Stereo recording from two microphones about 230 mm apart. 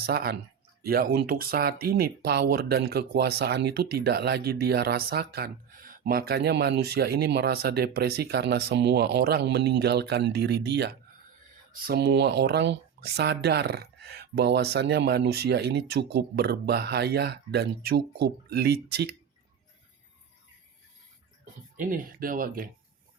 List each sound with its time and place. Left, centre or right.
0.0 s speech: right
21.8 s speech: right